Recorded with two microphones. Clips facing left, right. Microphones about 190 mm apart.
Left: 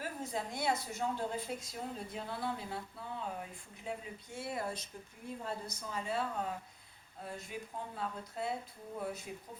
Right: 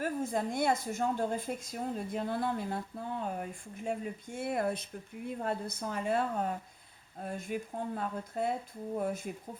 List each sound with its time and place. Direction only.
0.0 s a woman's voice: 50° right (ahead or behind)